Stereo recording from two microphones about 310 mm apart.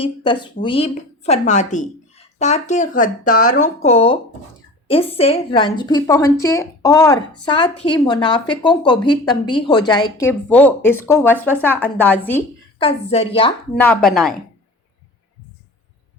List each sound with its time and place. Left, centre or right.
0.0 s a woman's voice: centre
12.8 s a woman's voice: centre
13.7 s a woman's voice: centre